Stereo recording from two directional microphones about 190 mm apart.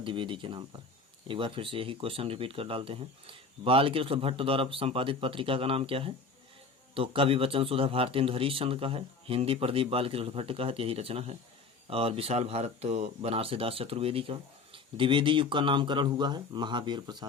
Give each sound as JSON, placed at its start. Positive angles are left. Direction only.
{"t": 0.0, "sound": "speech", "side_deg": -25}